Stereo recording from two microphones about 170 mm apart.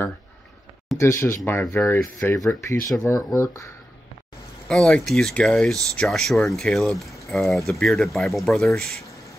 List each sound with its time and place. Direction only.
0.9 s speech: 15° left (ahead or behind)
4.6 s speech: 5° left (ahead or behind)